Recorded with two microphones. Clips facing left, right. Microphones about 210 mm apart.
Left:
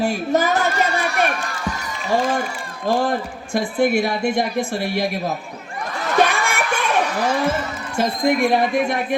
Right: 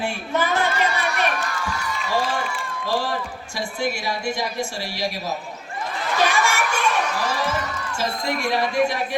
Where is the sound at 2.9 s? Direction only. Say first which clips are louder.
Left 6 dB; 50° left (ahead or behind).